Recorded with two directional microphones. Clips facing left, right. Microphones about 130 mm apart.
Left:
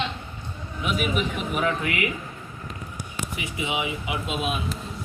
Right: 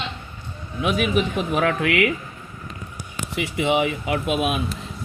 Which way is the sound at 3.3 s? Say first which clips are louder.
Right 9 dB; 70° right (ahead or behind).